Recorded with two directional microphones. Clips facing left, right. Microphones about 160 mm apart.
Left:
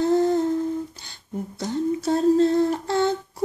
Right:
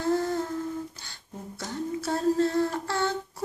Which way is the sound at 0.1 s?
20° left (ahead or behind).